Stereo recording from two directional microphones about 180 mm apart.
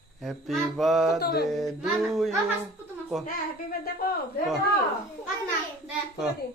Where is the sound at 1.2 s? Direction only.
60° left (ahead or behind).